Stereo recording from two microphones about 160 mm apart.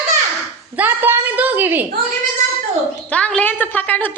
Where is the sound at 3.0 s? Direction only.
5° left (ahead or behind).